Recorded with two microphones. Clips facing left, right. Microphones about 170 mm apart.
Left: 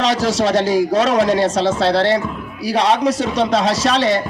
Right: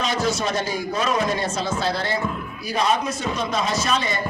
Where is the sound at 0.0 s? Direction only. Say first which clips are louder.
Left 7 dB; 85° left.